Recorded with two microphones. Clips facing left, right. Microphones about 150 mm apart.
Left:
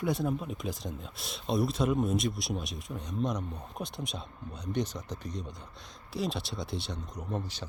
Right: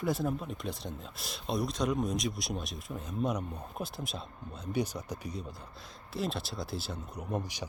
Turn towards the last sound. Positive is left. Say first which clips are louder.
# right 1 dB
turn(degrees=-10)  # may be behind; listen again after turning